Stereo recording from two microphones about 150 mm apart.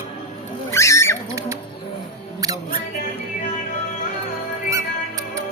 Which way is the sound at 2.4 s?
25° right (ahead or behind).